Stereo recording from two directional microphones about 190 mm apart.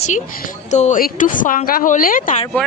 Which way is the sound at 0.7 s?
40° left (ahead or behind).